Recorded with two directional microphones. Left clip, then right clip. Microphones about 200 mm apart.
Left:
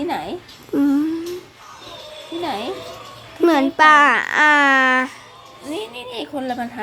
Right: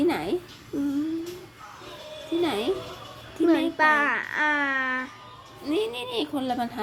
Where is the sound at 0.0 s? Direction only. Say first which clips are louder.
Left 1 dB; 5° right (ahead or behind).